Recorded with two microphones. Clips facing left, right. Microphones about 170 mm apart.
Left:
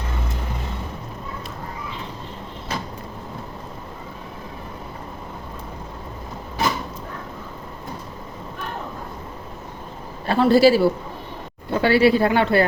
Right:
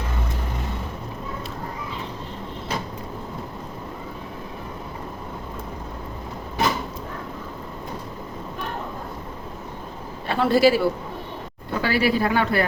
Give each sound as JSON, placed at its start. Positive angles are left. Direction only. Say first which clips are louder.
{"t": 10.2, "sound": "a man's voice", "louder": "left 3 dB", "side_deg": 35}